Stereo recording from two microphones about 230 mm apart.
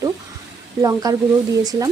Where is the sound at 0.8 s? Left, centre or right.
Centre.